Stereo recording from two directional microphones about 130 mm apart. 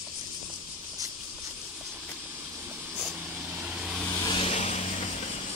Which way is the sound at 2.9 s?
5° right (ahead or behind).